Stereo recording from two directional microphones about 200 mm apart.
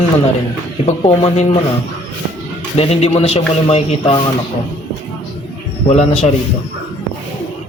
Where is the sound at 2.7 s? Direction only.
30° left (ahead or behind).